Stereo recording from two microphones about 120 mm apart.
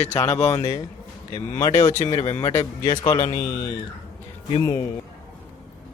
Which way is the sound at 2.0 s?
40° left (ahead or behind).